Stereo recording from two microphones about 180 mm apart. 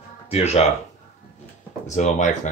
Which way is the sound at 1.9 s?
40° left (ahead or behind).